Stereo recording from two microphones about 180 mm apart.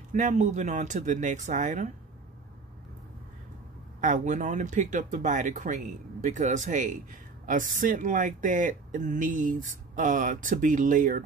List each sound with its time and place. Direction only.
0.1 s speech: 40° right (ahead or behind)
4.0 s speech: 45° right (ahead or behind)